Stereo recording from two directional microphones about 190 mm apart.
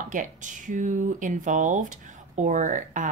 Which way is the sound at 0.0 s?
40° right (ahead or behind).